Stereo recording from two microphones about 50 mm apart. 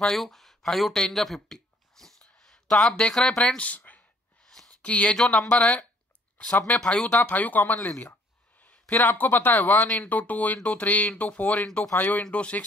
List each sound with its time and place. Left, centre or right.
0.2 s speech: centre
0.9 s a sound: centre; by 4.0 s left
4.5 s a sound: centre
4.8 s speech: left
5.1 s speech: centre
7.0 s speech: left
8.9 s speech: left
11.6 s speech: centre